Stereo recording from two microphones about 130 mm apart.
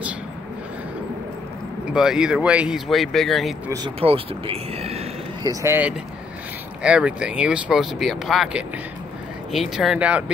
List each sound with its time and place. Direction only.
2.0 s speech: 5° right (ahead or behind)
4.0 s speech: 45° right (ahead or behind)
5.4 s speech: 25° right (ahead or behind)
6.8 s speech: 10° right (ahead or behind)